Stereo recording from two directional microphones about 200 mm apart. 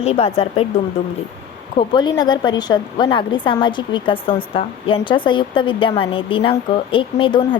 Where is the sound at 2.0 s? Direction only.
20° left (ahead or behind).